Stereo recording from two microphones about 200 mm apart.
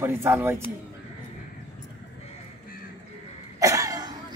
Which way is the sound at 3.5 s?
15° right (ahead or behind).